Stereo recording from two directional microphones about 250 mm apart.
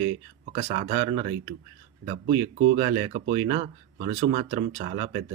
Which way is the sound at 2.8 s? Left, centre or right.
Right.